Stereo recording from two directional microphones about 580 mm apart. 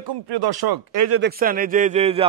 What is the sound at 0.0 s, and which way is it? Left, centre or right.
Speech, right.